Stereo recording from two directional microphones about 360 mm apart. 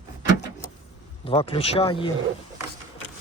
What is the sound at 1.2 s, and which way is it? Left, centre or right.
Speech, centre.